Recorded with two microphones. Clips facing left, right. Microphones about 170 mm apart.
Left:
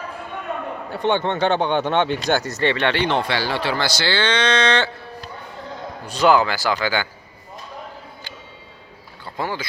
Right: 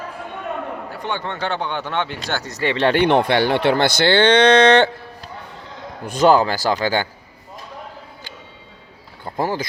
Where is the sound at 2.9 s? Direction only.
55° right (ahead or behind).